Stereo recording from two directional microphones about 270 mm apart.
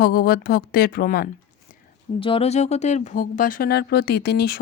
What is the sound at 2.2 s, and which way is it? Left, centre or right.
Speech, centre.